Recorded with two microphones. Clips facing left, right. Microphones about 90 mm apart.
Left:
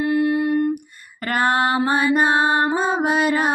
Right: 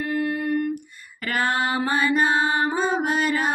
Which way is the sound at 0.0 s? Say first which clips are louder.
Left 6 dB; 10° left (ahead or behind).